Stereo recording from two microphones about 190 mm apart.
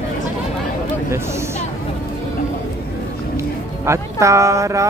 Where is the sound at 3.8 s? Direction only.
15° right (ahead or behind).